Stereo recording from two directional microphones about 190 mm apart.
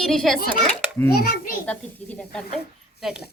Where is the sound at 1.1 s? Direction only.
50° left (ahead or behind).